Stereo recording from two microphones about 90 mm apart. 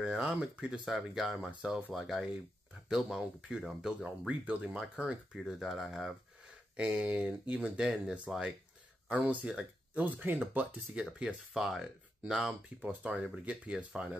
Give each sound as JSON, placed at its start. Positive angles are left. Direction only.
{"t": 0.0, "sound": "speech", "side_deg": -10}
{"t": 1.5, "sound": "speech", "side_deg": -10}
{"t": 6.8, "sound": "speech", "side_deg": -10}
{"t": 9.1, "sound": "speech", "side_deg": -15}
{"t": 10.0, "sound": "speech", "side_deg": -20}